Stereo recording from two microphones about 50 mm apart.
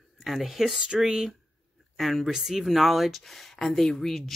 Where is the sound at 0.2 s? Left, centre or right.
Centre.